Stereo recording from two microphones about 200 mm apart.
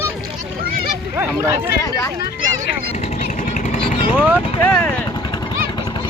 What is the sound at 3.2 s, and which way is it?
Vehicle, 40° left (ahead or behind).